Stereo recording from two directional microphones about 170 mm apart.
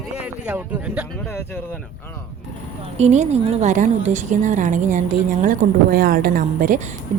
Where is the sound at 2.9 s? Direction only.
40° right (ahead or behind).